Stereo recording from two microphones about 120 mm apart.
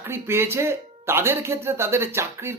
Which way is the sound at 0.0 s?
20° right (ahead or behind).